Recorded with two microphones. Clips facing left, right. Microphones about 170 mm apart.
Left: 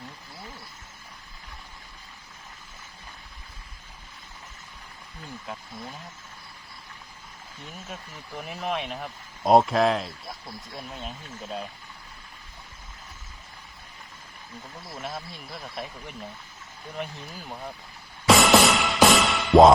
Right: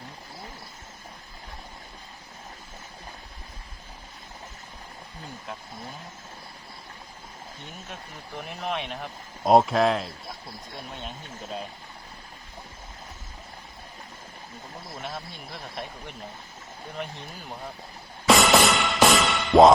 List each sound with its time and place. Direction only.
8.4 s speech: centre (ahead or behind)
15.0 s speech: centre (ahead or behind)
18.3 s music: centre (ahead or behind)